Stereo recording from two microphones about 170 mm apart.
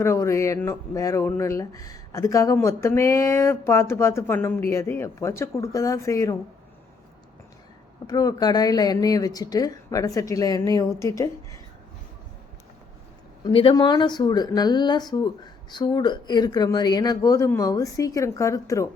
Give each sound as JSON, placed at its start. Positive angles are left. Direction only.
{"t": 0.0, "sound": "speech", "side_deg": 15}
{"t": 8.0, "sound": "speech", "side_deg": 20}
{"t": 13.4, "sound": "speech", "side_deg": 35}